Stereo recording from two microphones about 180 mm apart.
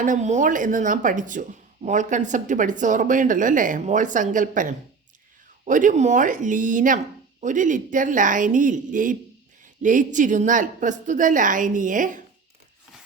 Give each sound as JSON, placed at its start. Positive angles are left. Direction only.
{"t": 0.0, "sound": "speech", "side_deg": -45}